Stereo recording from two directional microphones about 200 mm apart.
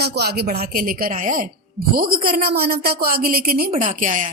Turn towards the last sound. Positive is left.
turn(degrees=-40)  # may be behind; listen again after turning